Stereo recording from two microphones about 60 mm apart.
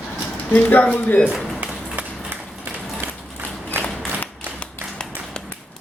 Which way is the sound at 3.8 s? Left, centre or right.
Right.